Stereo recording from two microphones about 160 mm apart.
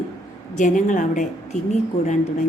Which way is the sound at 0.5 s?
50° left (ahead or behind).